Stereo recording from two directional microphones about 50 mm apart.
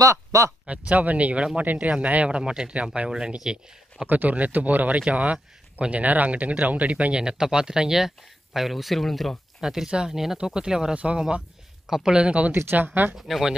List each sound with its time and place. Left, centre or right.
0.0 s speech: right
0.7 s speech: right
3.1 s speech: centre
4.1 s speech: right
7.2 s speech: centre
9.6 s speech: centre
12.2 s speech: right
12.7 s speech: right
13.1 s speech: centre